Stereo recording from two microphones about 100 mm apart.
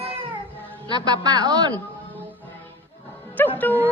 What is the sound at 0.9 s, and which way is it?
Speech, 45° right (ahead or behind).